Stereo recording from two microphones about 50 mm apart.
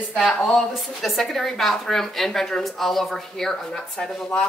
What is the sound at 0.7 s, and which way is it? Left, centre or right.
A woman's voice, centre.